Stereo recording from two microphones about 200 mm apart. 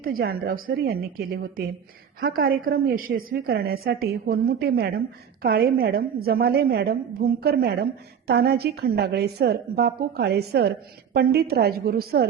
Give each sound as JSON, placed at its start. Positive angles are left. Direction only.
{"t": 0.0, "sound": "a woman's voice", "side_deg": -50}